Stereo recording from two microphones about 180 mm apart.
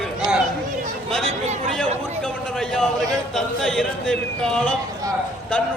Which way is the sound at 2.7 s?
5° left (ahead or behind).